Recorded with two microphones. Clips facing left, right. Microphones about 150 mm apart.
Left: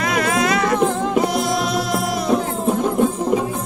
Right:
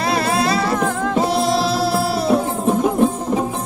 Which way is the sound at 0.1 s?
35° right (ahead or behind).